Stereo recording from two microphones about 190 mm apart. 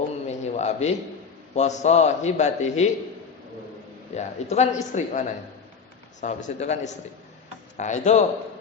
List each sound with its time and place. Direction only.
0.3 s a sound: 35° left (ahead or behind)
1.5 s a man's voice: 40° left (ahead or behind)
4.1 s a man's voice: 35° left (ahead or behind)